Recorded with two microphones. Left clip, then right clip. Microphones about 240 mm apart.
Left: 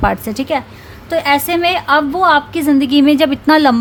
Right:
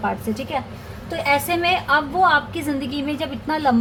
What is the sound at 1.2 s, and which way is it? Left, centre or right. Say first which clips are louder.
A woman's voice: left 5 dB; left.